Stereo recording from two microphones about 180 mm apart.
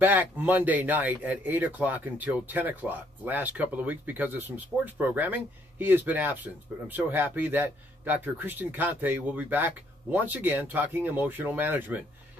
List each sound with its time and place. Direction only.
0.0 s speech: 10° right (ahead or behind)